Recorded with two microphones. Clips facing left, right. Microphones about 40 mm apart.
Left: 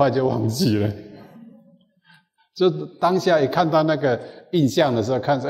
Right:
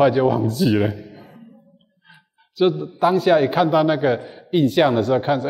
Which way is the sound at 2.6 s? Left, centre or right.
Right.